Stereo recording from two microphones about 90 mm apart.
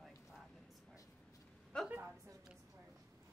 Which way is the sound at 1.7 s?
10° left (ahead or behind).